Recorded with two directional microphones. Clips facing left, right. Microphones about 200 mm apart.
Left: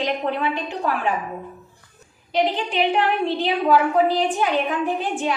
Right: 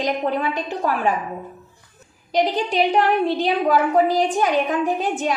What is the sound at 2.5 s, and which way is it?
A woman's voice, 40° right (ahead or behind).